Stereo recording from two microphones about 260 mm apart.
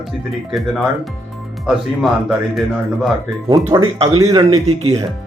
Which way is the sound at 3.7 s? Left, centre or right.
Centre.